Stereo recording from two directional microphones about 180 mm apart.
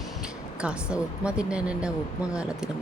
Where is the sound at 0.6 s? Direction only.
5° right (ahead or behind).